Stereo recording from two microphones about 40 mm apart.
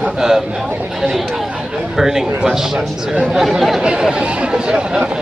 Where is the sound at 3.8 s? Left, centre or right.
Centre.